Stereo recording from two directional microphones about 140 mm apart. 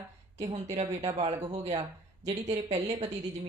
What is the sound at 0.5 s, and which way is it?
A woman's voice, 50° right (ahead or behind).